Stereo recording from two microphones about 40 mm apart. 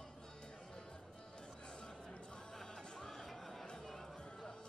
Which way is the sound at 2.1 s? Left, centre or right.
Left.